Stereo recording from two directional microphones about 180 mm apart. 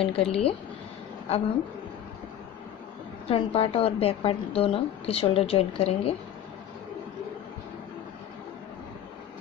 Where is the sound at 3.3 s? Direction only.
30° left (ahead or behind).